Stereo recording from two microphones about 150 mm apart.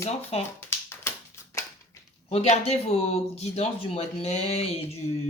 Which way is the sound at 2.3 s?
45° left (ahead or behind).